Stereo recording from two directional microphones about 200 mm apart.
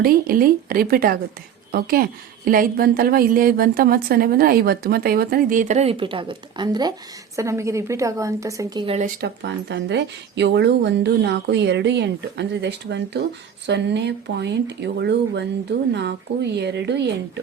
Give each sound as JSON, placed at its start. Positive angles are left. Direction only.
{"t": 0.0, "sound": "a woman's voice", "side_deg": -45}
{"t": 9.2, "sound": "speech", "side_deg": -60}